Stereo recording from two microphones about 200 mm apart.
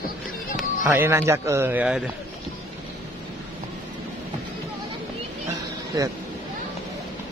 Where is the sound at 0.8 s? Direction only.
10° right (ahead or behind).